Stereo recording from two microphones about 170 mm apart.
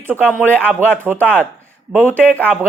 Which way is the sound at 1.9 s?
10° right (ahead or behind).